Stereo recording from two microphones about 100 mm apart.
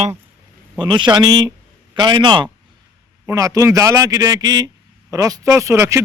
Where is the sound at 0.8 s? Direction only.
50° right (ahead or behind).